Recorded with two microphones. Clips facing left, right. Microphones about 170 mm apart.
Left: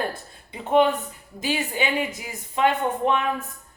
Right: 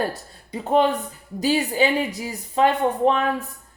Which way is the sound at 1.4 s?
35° right (ahead or behind).